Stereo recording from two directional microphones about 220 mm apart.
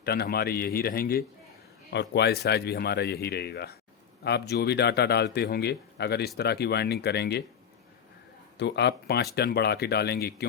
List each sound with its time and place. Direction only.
0.0 s a man's voice: 45° left (ahead or behind)
8.5 s a man's voice: 50° left (ahead or behind)